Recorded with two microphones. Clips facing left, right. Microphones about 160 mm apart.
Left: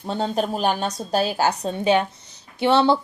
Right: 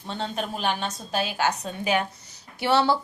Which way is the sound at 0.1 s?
40° left (ahead or behind).